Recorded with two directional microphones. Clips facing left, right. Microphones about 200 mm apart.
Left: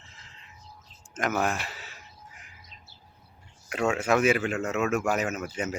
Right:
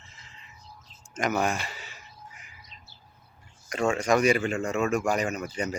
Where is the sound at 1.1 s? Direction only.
Centre (ahead or behind).